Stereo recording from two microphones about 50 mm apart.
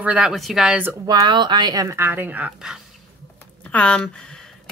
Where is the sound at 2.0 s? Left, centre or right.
Right.